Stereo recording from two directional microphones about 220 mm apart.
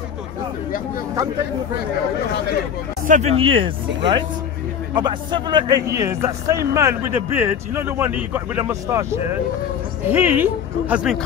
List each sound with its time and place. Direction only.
3.1 s speech: 30° right (ahead or behind); by 11.1 s 5° right (ahead or behind)